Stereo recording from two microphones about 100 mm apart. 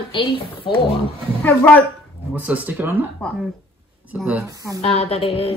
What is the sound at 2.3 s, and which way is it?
Speech, 15° right (ahead or behind).